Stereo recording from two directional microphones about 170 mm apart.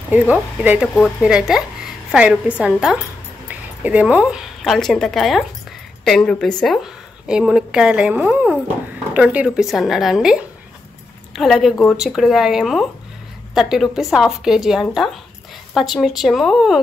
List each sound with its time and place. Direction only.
0.1 s a woman's voice: 10° right (ahead or behind)